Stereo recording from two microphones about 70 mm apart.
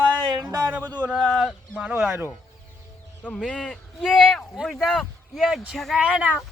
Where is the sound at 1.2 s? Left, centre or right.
Centre.